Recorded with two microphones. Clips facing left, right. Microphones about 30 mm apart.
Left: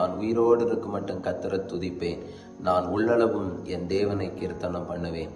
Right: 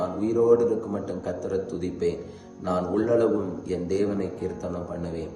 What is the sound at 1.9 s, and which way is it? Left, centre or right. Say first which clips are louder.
Speech: right 3 dB; left.